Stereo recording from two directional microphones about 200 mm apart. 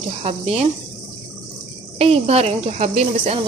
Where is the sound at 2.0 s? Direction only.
30° right (ahead or behind).